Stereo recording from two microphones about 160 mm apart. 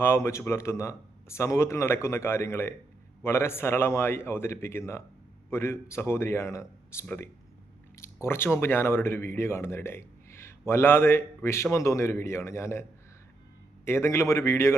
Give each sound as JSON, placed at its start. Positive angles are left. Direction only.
{"t": 0.0, "sound": "speech", "side_deg": 15}
{"t": 13.8, "sound": "speech", "side_deg": 15}